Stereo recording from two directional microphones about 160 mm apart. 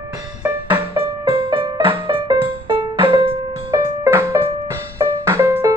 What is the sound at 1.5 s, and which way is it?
Music, 35° right (ahead or behind).